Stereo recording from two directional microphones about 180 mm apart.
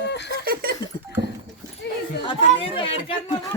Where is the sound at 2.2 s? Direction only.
30° left (ahead or behind).